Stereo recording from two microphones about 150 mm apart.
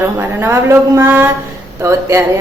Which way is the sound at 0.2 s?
15° right (ahead or behind).